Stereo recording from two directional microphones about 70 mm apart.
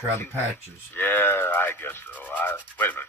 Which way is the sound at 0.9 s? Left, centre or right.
Left.